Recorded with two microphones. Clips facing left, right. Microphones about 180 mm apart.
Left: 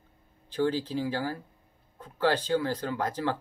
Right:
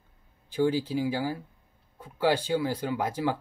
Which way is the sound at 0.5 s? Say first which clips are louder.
Right 2 dB; 10° right (ahead or behind).